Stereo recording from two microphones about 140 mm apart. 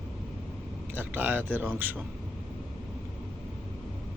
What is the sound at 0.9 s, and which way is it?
Speech, 15° right (ahead or behind).